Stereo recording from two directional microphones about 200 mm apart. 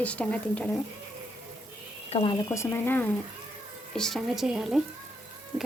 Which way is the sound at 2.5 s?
10° left (ahead or behind).